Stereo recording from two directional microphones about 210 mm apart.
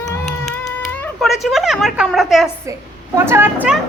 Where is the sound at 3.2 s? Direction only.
10° right (ahead or behind).